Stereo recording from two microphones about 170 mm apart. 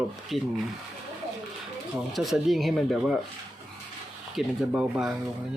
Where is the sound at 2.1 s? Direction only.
Centre (ahead or behind).